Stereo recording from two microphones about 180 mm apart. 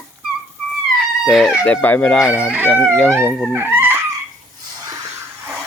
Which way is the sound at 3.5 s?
10° right (ahead or behind).